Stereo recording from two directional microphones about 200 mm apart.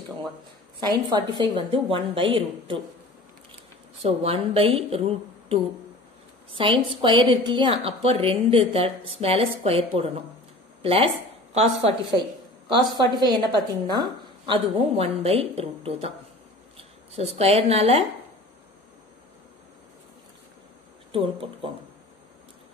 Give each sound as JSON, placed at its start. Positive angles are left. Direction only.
{"t": 0.7, "sound": "a woman's voice", "side_deg": -20}
{"t": 4.0, "sound": "a woman's voice", "side_deg": -30}
{"t": 12.6, "sound": "a woman's voice", "side_deg": -20}
{"t": 21.1, "sound": "a woman's voice", "side_deg": -25}